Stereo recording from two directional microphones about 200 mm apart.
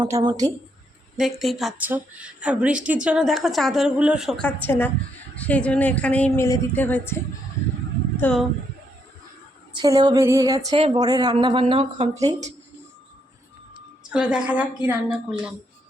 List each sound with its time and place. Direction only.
0.0 s speech: 20° right (ahead or behind)
1.1 s a woman's voice: centre (ahead or behind)
8.2 s a woman's voice: 5° left (ahead or behind)
9.7 s music: 20° right (ahead or behind)
10.7 s speech: 25° right (ahead or behind)
14.1 s a woman's voice: 5° right (ahead or behind)